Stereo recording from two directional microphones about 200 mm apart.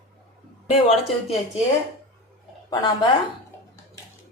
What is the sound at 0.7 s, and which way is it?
Speech, 30° left (ahead or behind).